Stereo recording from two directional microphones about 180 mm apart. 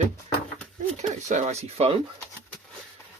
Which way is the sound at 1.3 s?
40° right (ahead or behind).